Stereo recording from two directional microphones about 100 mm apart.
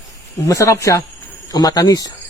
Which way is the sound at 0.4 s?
30° left (ahead or behind).